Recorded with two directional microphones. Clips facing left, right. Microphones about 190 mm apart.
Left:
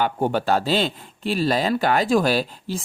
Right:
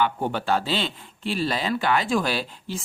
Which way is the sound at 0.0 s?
45° left (ahead or behind).